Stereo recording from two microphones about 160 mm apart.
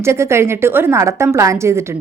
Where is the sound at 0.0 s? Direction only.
15° right (ahead or behind).